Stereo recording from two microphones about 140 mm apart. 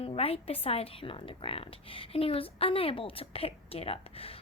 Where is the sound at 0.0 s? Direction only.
45° left (ahead or behind).